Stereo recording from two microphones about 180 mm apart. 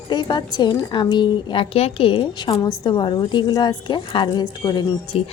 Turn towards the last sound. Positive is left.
turn(degrees=20)  # may be behind; listen again after turning